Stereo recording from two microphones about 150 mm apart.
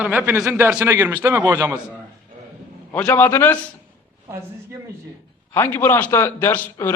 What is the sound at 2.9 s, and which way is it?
Speech, 10° left (ahead or behind).